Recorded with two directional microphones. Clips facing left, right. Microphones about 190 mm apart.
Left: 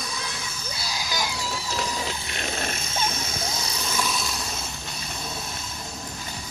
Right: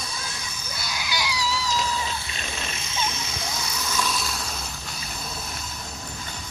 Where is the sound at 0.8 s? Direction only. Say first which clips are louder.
Even; 35° left (ahead or behind); by 1.6 s 50° left (ahead or behind).